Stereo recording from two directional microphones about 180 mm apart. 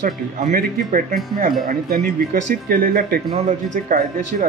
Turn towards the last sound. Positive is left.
turn(degrees=-45)  # may be behind; listen again after turning